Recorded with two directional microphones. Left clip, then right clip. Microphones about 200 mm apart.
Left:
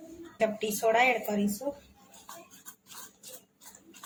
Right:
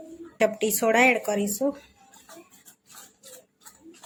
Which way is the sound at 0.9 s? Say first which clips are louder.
Right 4 dB; 60° right (ahead or behind).